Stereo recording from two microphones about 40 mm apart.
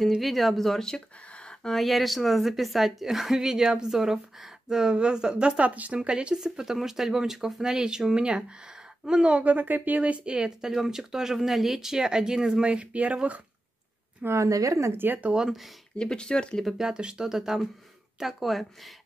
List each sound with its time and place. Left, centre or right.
0.2 s speech: centre
1.3 s a sound: left
1.8 s a woman's voice: centre; by 5.5 s right
5.6 s speech: right
6.0 s a woman's voice: right
9.3 s speech: right
10.3 s a woman's voice: centre
12.6 s speech: right
14.9 s speech: right
16.0 s speech: left
16.8 s a woman's voice: centre
18.2 s speech: centre